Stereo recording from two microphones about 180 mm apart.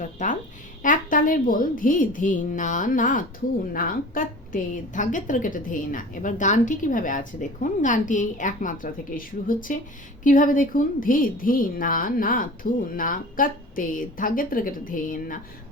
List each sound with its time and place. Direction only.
0.0 s a woman's voice: 45° left (ahead or behind)